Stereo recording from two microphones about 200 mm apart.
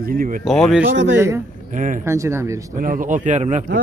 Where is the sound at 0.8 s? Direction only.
60° right (ahead or behind).